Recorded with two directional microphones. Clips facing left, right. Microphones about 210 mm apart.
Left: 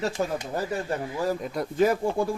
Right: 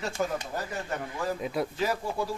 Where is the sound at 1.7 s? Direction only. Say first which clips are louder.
Left 7 dB; 50° left (ahead or behind).